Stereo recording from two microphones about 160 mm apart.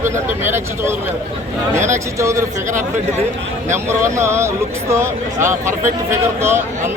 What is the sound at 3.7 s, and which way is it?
Speech, 15° right (ahead or behind).